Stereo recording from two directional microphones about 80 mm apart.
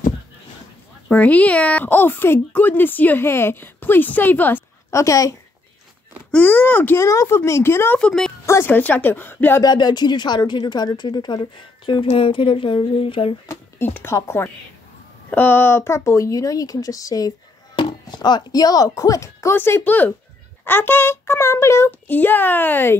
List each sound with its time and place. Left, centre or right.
1.1 s speech: centre
4.9 s speech: left
6.3 s speech: left
7.0 s a woman's voice: left
8.5 s a sound: left
8.7 s speech: left
9.6 s a woman's voice: left
13.7 s a woman's voice: left
17.7 s speech: left
19.5 s speech: left